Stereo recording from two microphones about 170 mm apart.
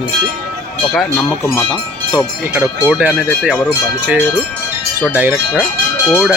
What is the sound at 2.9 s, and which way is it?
Speech, 5° right (ahead or behind).